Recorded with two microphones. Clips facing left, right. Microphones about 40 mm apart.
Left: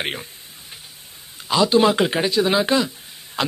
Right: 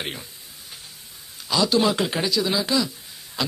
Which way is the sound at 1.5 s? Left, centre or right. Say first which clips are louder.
Left 4 dB; left.